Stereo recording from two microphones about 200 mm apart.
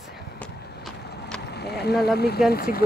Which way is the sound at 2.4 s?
50° left (ahead or behind).